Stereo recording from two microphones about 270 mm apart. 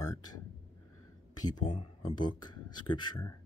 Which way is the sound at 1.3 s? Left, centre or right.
Centre.